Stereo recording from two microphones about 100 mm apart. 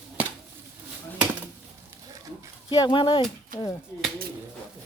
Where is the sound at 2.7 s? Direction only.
45° left (ahead or behind).